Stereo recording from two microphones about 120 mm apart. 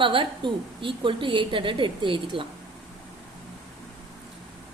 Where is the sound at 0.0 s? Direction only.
45° right (ahead or behind).